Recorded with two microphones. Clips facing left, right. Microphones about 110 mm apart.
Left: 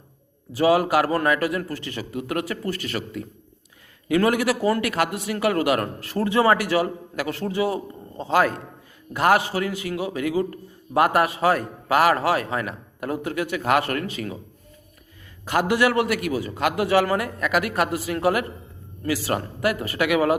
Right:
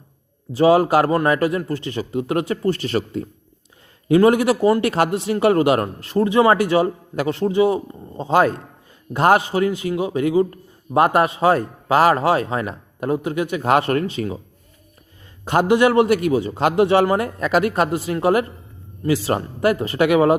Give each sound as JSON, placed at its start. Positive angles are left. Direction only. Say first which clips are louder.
{"t": 0.5, "sound": "a man's voice", "louder": "right 4 dB", "side_deg": -30}
{"t": 15.4, "sound": "a man's voice", "louder": "right 5 dB", "side_deg": -25}